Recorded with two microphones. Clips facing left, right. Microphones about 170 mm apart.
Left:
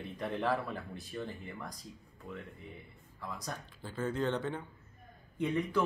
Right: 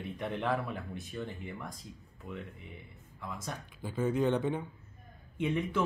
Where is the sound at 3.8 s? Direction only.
15° right (ahead or behind).